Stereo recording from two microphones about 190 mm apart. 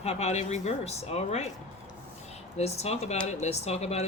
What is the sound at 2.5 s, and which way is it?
Speech, 35° left (ahead or behind).